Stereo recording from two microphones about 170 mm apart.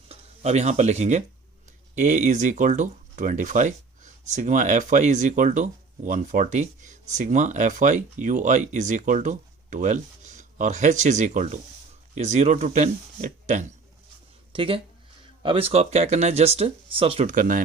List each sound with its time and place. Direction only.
0.1 s speech: 40° right (ahead or behind)
14.5 s speech: 30° right (ahead or behind)